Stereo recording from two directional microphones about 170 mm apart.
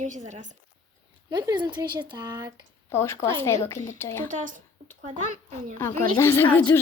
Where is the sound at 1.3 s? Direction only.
25° right (ahead or behind).